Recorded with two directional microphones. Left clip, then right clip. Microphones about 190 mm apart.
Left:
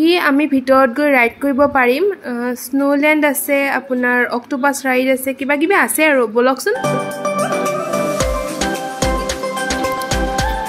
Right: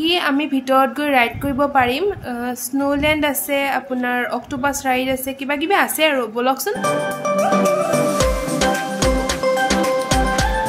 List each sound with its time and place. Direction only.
0.0 s a woman's voice: 25° left (ahead or behind)
8.2 s music: centre (ahead or behind)